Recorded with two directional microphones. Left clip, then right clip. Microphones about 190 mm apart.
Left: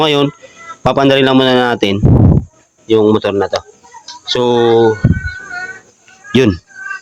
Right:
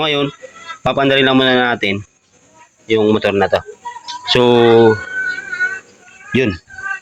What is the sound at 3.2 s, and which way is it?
Speech, 15° left (ahead or behind).